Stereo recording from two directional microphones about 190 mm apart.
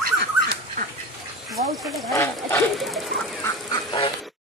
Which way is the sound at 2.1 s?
15° left (ahead or behind).